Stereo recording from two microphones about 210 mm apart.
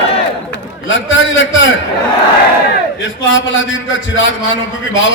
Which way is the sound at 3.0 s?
65° left (ahead or behind).